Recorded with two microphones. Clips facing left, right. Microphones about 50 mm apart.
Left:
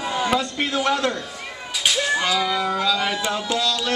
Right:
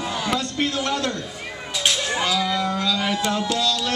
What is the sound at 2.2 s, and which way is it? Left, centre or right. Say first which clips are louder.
Speech: left 1 dB; centre.